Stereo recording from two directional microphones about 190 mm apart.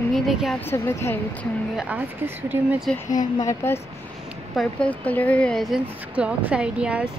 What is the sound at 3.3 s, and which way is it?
A woman's voice, 15° left (ahead or behind).